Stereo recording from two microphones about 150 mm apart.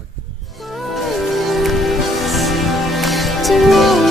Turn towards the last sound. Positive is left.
turn(degrees=0)  # may be behind; listen again after turning